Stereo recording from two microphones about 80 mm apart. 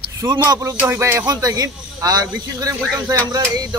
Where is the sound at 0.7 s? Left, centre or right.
Right.